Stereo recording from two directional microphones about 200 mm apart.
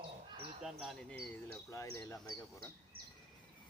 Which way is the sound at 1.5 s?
15° left (ahead or behind).